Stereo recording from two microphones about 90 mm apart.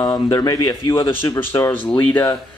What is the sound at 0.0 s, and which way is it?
Speech, 40° left (ahead or behind).